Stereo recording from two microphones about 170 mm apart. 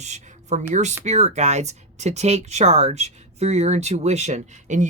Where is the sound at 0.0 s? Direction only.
45° right (ahead or behind).